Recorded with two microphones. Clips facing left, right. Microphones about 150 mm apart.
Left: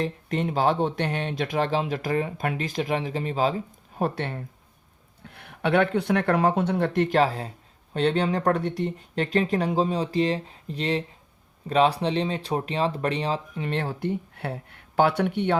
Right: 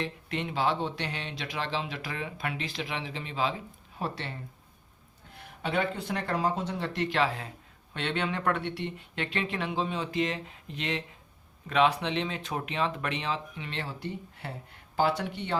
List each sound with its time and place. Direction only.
0.0 s speech: 45° left (ahead or behind); by 15.5 s 60° left (ahead or behind)